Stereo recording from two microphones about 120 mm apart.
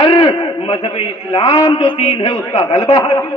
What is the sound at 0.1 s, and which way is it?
A man's voice, 45° left (ahead or behind).